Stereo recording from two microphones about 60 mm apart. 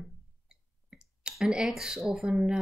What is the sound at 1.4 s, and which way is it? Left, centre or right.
Speech, centre.